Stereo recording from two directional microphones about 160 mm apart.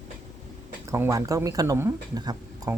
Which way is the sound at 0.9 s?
20° right (ahead or behind).